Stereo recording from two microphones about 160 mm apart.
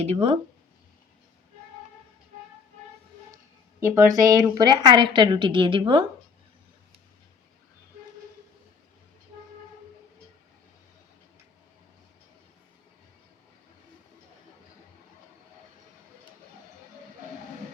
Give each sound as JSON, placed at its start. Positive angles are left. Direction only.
{"t": 0.0, "sound": "speech", "side_deg": -40}
{"t": 3.8, "sound": "a woman's voice", "side_deg": -15}